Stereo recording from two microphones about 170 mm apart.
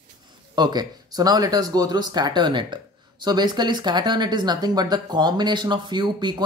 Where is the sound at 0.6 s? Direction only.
25° right (ahead or behind).